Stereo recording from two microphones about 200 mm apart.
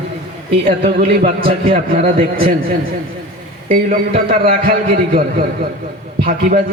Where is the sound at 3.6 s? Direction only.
40° right (ahead or behind).